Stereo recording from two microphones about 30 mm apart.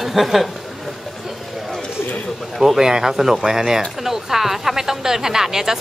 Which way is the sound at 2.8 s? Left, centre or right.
Right.